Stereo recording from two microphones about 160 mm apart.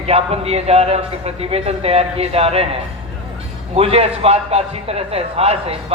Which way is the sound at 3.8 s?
40° right (ahead or behind).